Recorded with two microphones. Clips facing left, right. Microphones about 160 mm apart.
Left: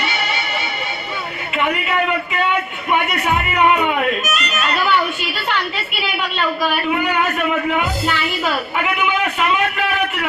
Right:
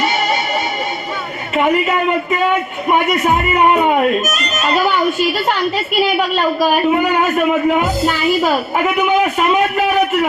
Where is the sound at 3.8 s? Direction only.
40° right (ahead or behind).